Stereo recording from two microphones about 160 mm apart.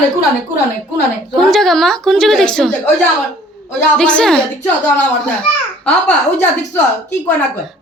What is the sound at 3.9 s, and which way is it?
A woman's voice, 5° left (ahead or behind).